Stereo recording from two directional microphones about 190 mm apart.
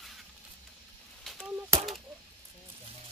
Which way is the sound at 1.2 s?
Centre (ahead or behind).